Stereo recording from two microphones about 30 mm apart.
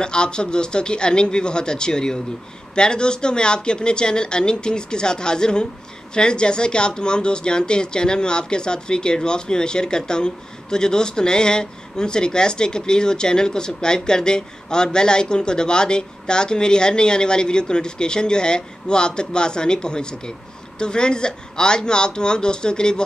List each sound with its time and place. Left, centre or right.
0.0 s speech: left